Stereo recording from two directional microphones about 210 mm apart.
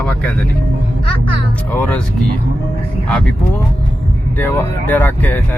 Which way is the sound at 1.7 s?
5° left (ahead or behind).